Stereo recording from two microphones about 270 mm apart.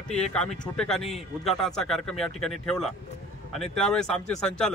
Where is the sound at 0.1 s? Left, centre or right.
Centre.